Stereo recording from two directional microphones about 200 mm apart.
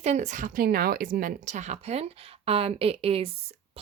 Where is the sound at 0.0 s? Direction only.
35° right (ahead or behind).